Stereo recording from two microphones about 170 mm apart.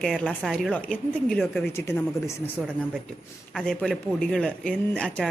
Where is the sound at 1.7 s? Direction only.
15° left (ahead or behind).